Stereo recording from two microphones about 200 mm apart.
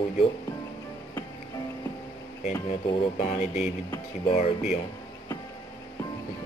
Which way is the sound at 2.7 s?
35° left (ahead or behind).